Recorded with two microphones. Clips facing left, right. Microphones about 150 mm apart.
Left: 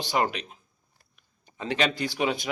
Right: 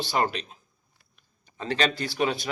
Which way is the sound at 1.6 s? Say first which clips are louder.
Even; 15° left (ahead or behind).